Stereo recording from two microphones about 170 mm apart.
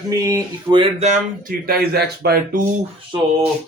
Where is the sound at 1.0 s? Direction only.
45° right (ahead or behind).